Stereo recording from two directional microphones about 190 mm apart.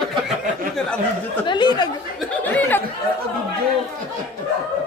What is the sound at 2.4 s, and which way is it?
Speech, 10° left (ahead or behind).